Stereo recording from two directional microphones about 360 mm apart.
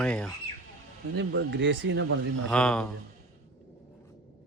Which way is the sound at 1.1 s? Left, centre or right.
Right.